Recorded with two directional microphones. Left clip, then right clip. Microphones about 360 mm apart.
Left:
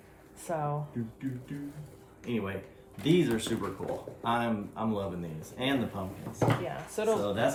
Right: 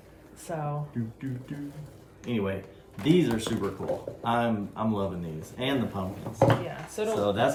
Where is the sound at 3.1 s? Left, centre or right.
Centre.